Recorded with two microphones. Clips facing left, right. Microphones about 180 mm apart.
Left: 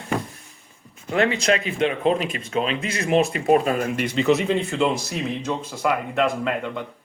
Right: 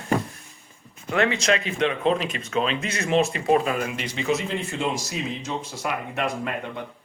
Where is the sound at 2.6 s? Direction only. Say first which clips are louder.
Left 1 dB; 35° right (ahead or behind).